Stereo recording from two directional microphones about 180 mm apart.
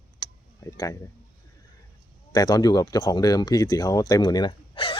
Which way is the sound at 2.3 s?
20° left (ahead or behind).